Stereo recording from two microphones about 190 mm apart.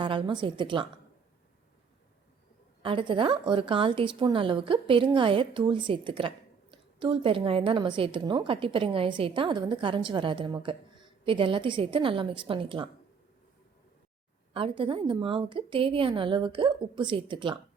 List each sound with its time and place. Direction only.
0.0 s speech: 25° right (ahead or behind)
2.8 s speech: 25° right (ahead or behind)
14.5 s speech: 25° right (ahead or behind)